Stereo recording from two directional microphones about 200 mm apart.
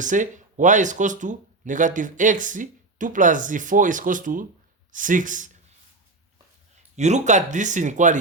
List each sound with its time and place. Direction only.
0.0 s speech: 40° right (ahead or behind)
6.9 s speech: 35° right (ahead or behind)